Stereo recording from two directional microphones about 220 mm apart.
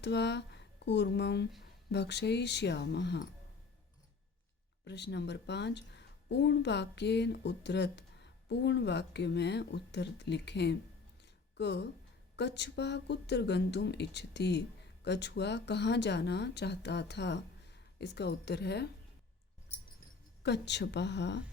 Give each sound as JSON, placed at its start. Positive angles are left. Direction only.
{"t": 0.0, "sound": "speech", "side_deg": 50}
{"t": 4.9, "sound": "speech", "side_deg": 50}
{"t": 11.2, "sound": "a sound", "side_deg": 50}
{"t": 12.4, "sound": "speech", "side_deg": 50}
{"t": 20.4, "sound": "speech", "side_deg": 50}